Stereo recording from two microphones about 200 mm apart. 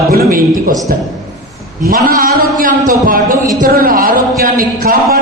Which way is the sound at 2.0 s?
45° right (ahead or behind).